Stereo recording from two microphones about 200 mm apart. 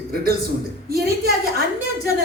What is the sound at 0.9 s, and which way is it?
Speech, 50° right (ahead or behind).